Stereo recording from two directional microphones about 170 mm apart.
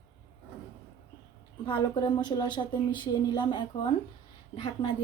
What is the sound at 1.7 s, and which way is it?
Speech, 25° left (ahead or behind).